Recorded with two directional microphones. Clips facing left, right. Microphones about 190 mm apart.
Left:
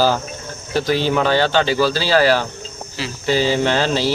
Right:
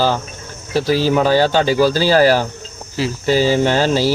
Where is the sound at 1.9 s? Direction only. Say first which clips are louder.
Right 3 dB; 45° right (ahead or behind).